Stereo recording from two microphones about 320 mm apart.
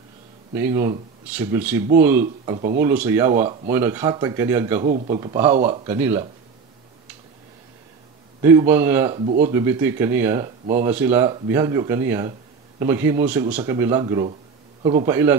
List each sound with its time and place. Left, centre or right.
0.6 s speech: centre
2.5 s speech: right
2.8 s speech: centre
4.8 s speech: right
5.9 s speech: centre
8.4 s speech: centre